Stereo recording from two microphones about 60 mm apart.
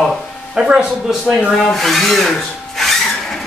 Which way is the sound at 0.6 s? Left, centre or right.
Centre.